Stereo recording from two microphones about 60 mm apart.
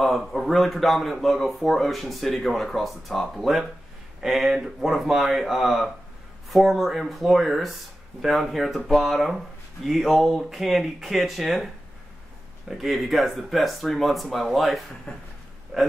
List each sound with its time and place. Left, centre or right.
0.0 s speech: centre
15.1 s a sound: left
15.7 s speech: centre